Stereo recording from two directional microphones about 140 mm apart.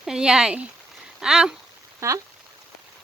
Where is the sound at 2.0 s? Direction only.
20° right (ahead or behind).